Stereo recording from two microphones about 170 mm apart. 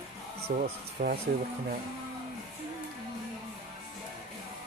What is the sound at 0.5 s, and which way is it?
Speech, 50° right (ahead or behind).